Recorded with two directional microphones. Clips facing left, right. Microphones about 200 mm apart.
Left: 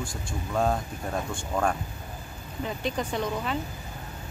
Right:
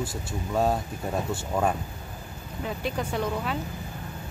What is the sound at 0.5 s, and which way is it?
Speech, 5° right (ahead or behind).